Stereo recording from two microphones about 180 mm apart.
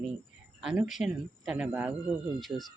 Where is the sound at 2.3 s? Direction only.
Centre (ahead or behind).